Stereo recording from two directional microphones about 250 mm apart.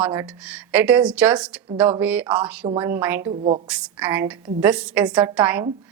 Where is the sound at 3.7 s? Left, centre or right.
Centre.